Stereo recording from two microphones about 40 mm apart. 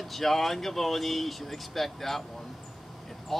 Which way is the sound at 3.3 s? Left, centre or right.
Centre.